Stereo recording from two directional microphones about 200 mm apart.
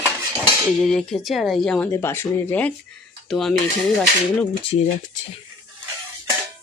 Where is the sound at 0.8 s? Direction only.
5° left (ahead or behind).